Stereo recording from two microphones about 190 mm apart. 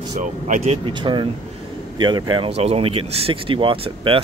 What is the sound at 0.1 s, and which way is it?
Speech, 35° right (ahead or behind).